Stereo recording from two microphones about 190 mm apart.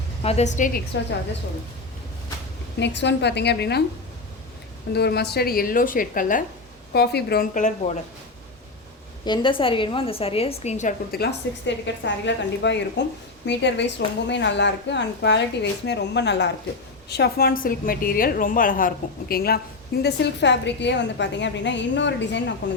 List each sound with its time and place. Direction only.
0.2 s a woman's voice: 35° left (ahead or behind)
2.7 s a woman's voice: 65° left (ahead or behind)
4.9 s a woman's voice: 60° left (ahead or behind)
6.9 s a woman's voice: 60° left (ahead or behind); by 7.9 s 40° left (ahead or behind)
9.2 s a woman's voice: 25° left (ahead or behind); by 11.2 s 40° left (ahead or behind)
11.2 s a woman's voice: 65° left (ahead or behind)